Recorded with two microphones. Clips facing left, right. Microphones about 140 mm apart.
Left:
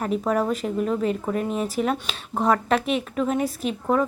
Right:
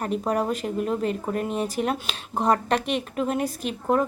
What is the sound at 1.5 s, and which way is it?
Speech, centre (ahead or behind).